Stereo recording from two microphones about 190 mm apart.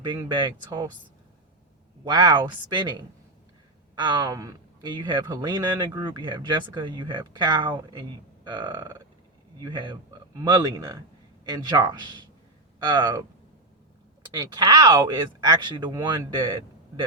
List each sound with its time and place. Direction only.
0.0 s speech: 25° right (ahead or behind)
2.0 s speech: 20° right (ahead or behind)
14.3 s speech: 20° right (ahead or behind)